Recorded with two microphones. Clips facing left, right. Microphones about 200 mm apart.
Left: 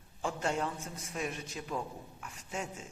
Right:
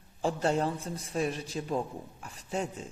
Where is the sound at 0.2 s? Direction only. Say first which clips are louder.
Right 6 dB; 35° right (ahead or behind).